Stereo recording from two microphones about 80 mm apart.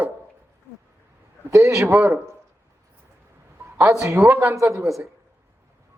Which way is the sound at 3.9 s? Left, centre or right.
Right.